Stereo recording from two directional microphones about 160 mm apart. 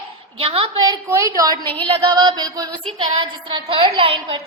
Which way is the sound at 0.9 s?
20° right (ahead or behind).